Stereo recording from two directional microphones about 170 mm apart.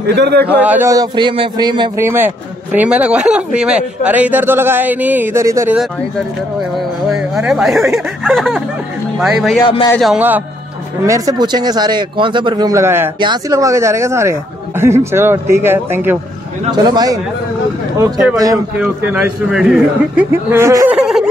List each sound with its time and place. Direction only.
0.1 s a man's voice: 75° right (ahead or behind)
0.5 s speech: 10° right (ahead or behind); by 1.9 s 25° right (ahead or behind)
2.0 s a man's voice: 15° right (ahead or behind)
7.1 s a man's voice: 5° right (ahead or behind)
11.1 s a man's voice: 20° right (ahead or behind)
16.7 s speech: 25° right (ahead or behind)
18.8 s a man's voice: 10° right (ahead or behind)